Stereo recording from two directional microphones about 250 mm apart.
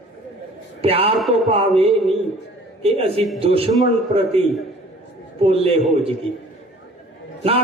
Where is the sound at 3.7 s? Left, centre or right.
Centre.